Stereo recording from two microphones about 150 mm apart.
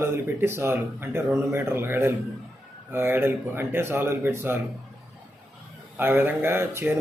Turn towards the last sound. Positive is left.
turn(degrees=-15)  # may be behind; listen again after turning